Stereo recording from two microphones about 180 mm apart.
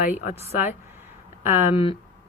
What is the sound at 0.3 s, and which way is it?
Speech, 35° left (ahead or behind).